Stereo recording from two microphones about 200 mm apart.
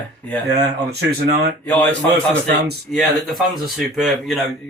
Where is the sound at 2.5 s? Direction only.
55° right (ahead or behind).